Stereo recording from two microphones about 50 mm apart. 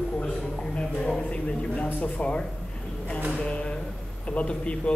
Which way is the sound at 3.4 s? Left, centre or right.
Left.